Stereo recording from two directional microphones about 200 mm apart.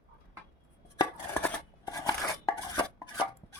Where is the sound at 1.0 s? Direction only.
15° left (ahead or behind).